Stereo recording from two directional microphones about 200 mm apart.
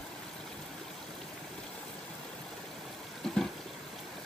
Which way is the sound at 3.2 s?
Centre (ahead or behind).